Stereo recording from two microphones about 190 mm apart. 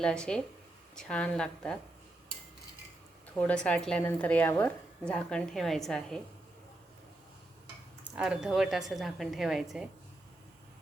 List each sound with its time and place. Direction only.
0.0 s a woman's voice: 5° left (ahead or behind)
3.3 s a woman's voice: 5° left (ahead or behind)
8.1 s a woman's voice: 5° right (ahead or behind)